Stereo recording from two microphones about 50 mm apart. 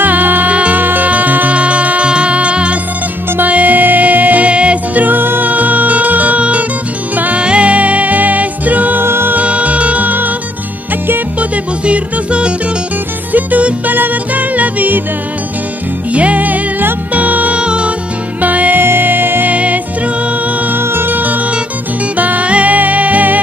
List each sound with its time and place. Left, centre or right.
0.0 s music: right
9.0 s music: right
9.3 s music: right
11.3 s music: right
16.1 s music: right
17.6 s music: right
18.4 s music: right
18.8 s music: right
19.5 s music: right
20.7 s music: right